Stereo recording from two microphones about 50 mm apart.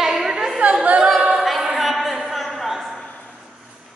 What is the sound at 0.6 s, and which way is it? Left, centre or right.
A capella, right.